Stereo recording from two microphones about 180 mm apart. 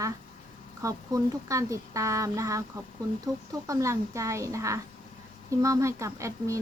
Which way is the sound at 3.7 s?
15° right (ahead or behind).